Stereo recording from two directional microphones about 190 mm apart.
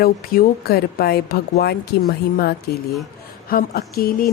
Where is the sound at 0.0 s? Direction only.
55° left (ahead or behind).